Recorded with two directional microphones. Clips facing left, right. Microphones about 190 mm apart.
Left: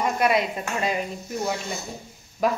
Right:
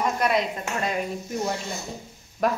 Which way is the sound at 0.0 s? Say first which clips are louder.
Left 1 dB; 5° left (ahead or behind).